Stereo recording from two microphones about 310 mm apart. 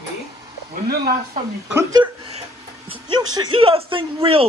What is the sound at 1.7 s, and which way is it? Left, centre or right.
A man's voice, centre.